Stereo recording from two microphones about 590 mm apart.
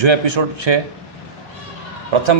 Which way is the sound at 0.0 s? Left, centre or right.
Right.